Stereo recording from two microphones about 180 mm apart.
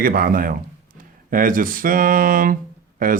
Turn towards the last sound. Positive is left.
turn(degrees=-50)  # may be behind; listen again after turning